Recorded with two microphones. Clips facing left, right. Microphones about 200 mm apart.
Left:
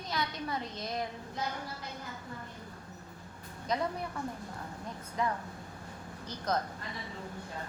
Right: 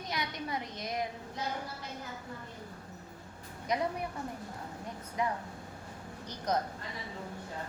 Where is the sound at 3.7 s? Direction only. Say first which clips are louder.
Right 1 dB; 15° right (ahead or behind).